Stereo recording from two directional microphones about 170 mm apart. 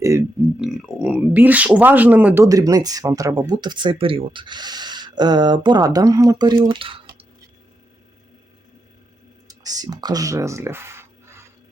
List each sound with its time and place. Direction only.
0.6 s speech: 5° right (ahead or behind); by 7.3 s 30° right (ahead or behind)
9.5 s speech: 25° right (ahead or behind)